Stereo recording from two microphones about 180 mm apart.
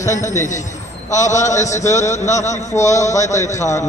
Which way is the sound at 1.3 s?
40° left (ahead or behind).